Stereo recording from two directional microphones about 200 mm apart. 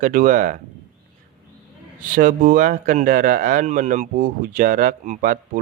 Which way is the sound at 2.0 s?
40° right (ahead or behind).